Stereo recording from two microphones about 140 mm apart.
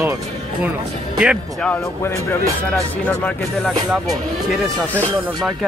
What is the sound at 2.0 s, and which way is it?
Speech, 20° left (ahead or behind).